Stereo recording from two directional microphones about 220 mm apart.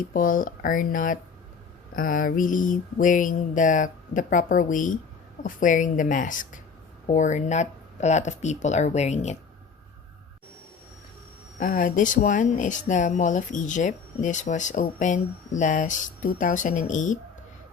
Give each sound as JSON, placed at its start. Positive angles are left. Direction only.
{"t": 0.1, "sound": "speech", "side_deg": 40}
{"t": 11.6, "sound": "speech", "side_deg": 35}